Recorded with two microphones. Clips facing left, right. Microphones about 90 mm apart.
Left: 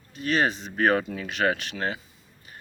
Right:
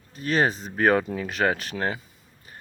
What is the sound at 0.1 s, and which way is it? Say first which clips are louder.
Speech: right 1 dB; 35° right (ahead or behind).